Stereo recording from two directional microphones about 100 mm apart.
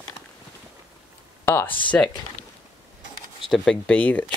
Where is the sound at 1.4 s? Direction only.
25° left (ahead or behind).